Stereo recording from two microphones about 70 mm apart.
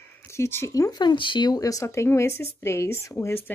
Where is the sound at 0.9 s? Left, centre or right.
Left.